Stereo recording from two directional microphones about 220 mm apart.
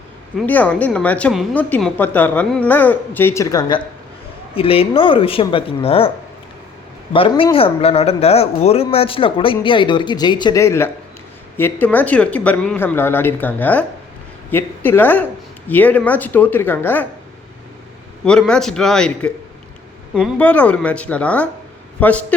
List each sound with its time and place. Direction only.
0.3 s a woman's voice: 5° left (ahead or behind); by 6.1 s 25° left (ahead or behind)
7.1 s a woman's voice: 25° left (ahead or behind); by 17.1 s 10° left (ahead or behind)
18.3 s a man's voice: 5° left (ahead or behind)